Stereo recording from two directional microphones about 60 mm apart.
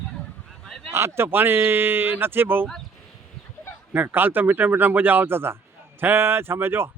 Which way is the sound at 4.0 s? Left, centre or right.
Right.